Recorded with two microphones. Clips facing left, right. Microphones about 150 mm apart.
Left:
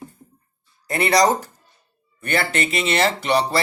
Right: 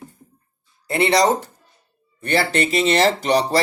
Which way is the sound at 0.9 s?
25° right (ahead or behind).